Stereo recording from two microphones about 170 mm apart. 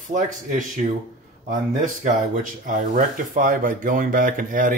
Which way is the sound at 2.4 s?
50° right (ahead or behind).